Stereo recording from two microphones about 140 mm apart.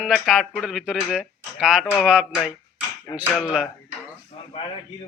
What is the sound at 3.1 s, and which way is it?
Speech, 30° left (ahead or behind).